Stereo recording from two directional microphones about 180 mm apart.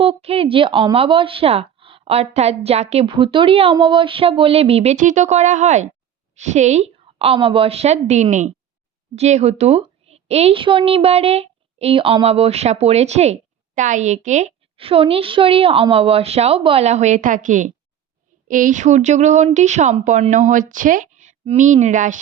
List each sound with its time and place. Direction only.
0.0 s a woman's voice: 35° right (ahead or behind)